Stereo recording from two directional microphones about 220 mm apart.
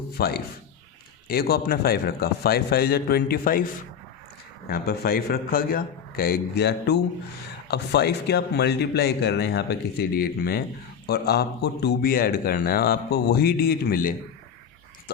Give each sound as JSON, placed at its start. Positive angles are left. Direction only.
{"t": 0.2, "sound": "speech", "side_deg": 45}
{"t": 4.7, "sound": "speech", "side_deg": 45}